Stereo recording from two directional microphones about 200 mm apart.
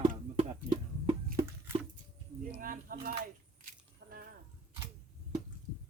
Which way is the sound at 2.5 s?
45° right (ahead or behind).